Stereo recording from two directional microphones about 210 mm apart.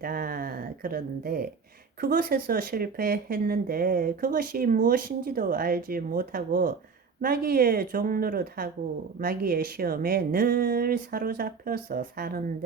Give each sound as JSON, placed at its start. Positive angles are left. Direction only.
{"t": 0.0, "sound": "speech", "side_deg": -45}